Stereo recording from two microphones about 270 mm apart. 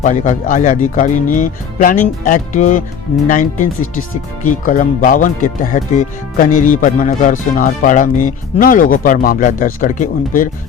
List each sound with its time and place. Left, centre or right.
0.0 s speech: left